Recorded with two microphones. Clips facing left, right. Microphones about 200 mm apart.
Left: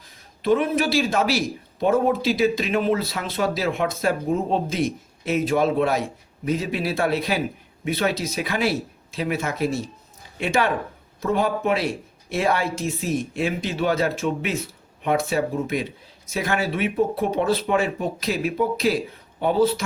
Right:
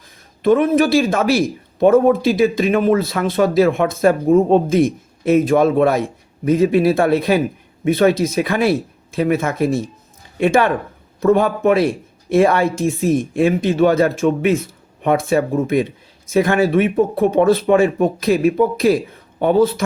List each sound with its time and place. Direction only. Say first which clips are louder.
0.4 s speech: right 7 dB; 50° right (ahead or behind)